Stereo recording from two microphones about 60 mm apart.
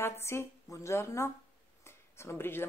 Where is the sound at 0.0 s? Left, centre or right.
Left.